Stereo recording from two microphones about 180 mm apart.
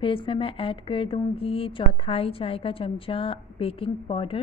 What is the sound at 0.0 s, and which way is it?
A woman's voice, 30° left (ahead or behind).